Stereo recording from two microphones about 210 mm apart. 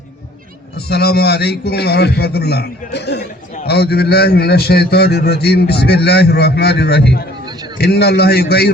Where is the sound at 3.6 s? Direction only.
50° left (ahead or behind).